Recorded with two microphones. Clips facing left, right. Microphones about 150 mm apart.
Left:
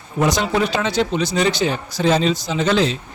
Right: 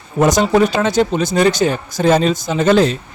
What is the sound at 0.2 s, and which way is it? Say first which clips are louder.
Speech: right 6 dB; 45° right (ahead or behind).